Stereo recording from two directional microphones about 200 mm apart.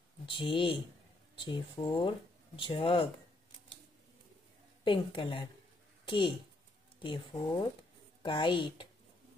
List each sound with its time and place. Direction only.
0.3 s speech: 25° left (ahead or behind)
4.8 s a woman's voice: 25° left (ahead or behind)